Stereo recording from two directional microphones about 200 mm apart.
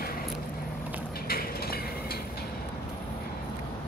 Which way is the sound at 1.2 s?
50° left (ahead or behind).